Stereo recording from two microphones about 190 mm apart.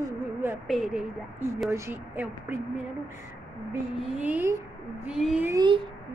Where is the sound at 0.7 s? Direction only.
Centre (ahead or behind).